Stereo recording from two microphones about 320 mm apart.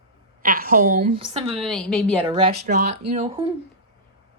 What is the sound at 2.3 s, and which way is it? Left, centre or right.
A woman's voice, centre.